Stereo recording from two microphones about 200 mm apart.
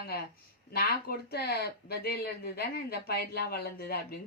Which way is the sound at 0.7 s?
50° left (ahead or behind).